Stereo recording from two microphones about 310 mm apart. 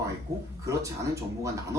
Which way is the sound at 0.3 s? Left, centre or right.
Centre.